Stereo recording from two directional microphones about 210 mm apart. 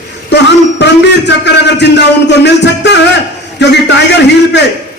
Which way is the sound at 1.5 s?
55° left (ahead or behind).